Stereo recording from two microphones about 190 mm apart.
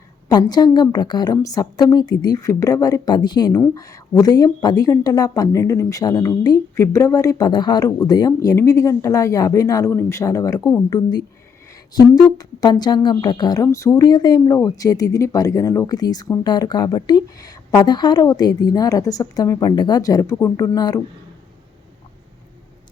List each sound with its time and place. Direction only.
0.3 s speech: 20° left (ahead or behind)